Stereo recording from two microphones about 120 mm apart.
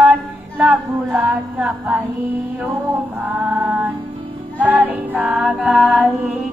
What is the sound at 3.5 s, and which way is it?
Music, 15° right (ahead or behind).